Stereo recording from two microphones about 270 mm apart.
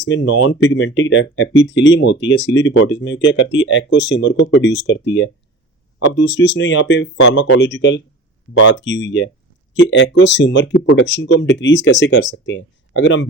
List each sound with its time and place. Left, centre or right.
0.0 s speech: left